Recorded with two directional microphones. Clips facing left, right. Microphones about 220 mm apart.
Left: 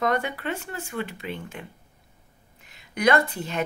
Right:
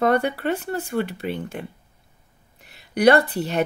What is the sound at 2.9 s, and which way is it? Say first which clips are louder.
Speech: right 6 dB; 35° right (ahead or behind).